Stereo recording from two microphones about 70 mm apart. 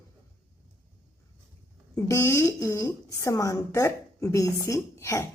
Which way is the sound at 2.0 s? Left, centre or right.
Left.